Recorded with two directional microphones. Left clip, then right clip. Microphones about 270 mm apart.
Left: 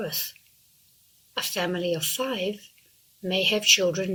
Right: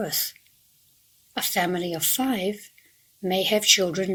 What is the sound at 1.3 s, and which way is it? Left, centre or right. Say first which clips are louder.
Speech: right 3 dB; right.